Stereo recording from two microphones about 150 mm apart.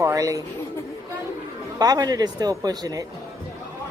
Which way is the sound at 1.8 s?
25° right (ahead or behind).